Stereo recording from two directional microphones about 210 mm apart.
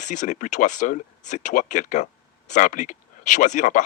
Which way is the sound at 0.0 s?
35° left (ahead or behind).